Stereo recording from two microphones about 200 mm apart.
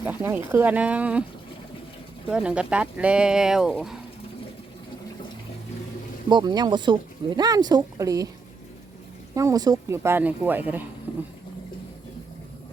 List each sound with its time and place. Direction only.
0.0 s speech: 10° right (ahead or behind)
2.2 s speech: 5° right (ahead or behind)
6.2 s speech: 20° right (ahead or behind)
9.3 s speech: 15° right (ahead or behind)